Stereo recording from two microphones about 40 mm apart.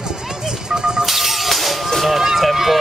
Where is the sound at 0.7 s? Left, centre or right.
Centre.